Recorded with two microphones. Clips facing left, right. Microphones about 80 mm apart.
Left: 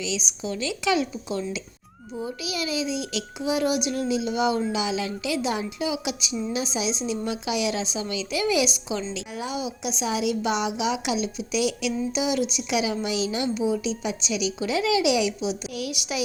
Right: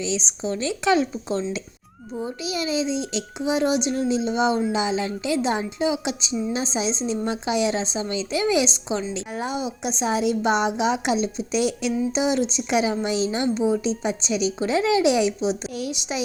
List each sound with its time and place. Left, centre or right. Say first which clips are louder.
0.0 s a woman's voice: right 3 dB; right